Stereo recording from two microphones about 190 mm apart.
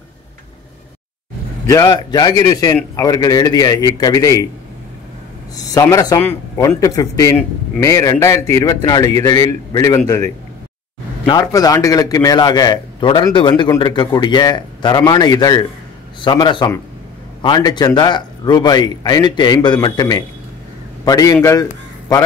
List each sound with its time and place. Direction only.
1.7 s a man's voice: 20° left (ahead or behind)
5.6 s a man's voice: 20° left (ahead or behind)